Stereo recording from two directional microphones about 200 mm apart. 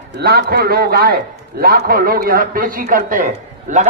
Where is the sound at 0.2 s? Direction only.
50° right (ahead or behind).